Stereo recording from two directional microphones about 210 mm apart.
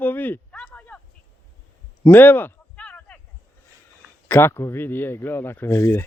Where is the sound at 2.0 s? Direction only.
10° left (ahead or behind).